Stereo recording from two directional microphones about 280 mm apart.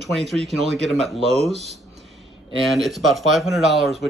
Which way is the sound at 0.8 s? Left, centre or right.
Centre.